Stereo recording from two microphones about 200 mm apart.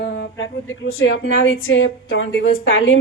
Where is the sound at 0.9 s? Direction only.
75° left (ahead or behind).